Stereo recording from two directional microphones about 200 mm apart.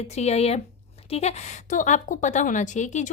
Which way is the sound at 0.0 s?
35° left (ahead or behind).